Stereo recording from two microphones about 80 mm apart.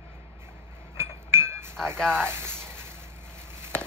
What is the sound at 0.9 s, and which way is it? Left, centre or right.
Chink, right.